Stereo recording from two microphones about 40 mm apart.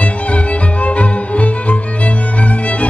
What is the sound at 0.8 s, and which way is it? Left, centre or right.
Music, left.